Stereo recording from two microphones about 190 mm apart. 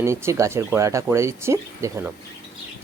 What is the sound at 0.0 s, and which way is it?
Speech, 15° right (ahead or behind).